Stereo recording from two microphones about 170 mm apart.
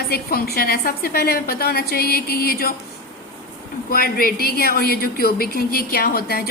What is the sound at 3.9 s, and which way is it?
A woman's voice, 60° left (ahead or behind).